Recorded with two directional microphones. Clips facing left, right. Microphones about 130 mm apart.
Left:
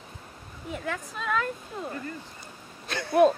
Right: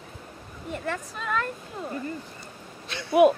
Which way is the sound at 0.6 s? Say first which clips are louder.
Right 2 dB; centre (ahead or behind).